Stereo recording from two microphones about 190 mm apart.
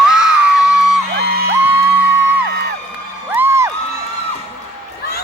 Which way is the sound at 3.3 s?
10° right (ahead or behind).